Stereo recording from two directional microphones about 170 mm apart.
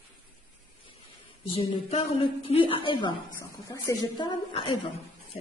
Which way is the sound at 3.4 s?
20° left (ahead or behind).